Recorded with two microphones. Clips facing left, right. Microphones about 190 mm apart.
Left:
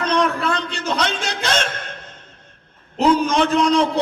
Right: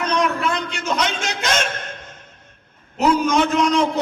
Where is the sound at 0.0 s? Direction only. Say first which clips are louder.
Left 1 dB; 30° left (ahead or behind).